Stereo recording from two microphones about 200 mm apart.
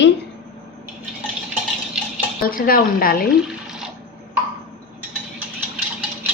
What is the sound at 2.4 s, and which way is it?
Speech, 45° left (ahead or behind).